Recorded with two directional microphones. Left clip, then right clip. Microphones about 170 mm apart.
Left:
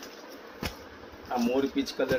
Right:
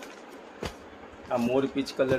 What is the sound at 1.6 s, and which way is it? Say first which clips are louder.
Speech: right 1 dB; 50° right (ahead or behind).